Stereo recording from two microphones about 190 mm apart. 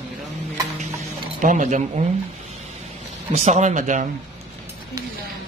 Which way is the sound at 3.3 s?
35° right (ahead or behind).